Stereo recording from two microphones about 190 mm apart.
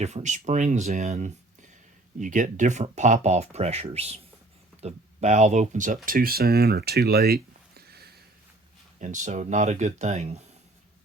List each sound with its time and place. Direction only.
0.0 s speech: 40° right (ahead or behind); by 8.1 s 55° right (ahead or behind)
9.0 s speech: 40° right (ahead or behind)